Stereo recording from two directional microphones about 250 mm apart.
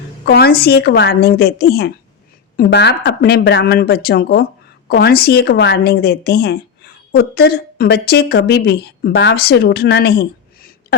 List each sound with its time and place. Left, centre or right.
0.3 s a woman's voice: left